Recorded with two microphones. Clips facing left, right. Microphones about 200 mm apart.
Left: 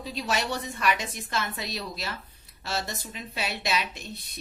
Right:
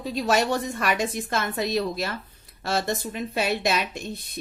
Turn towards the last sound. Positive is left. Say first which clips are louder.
# right 5 dB
turn(degrees=-50)  # may be behind; listen again after turning